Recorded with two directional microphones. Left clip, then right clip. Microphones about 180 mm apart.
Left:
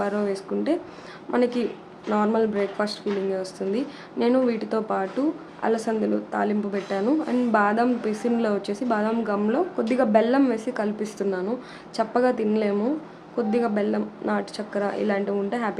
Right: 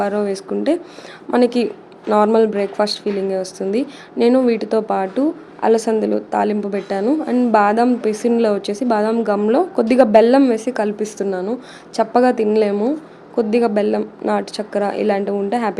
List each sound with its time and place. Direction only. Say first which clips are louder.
0.0 s a woman's voice: right 6 dB; 30° right (ahead or behind)